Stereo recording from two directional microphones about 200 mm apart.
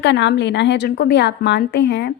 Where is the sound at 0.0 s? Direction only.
60° left (ahead or behind).